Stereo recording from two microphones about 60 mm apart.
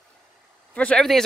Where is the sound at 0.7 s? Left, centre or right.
Centre.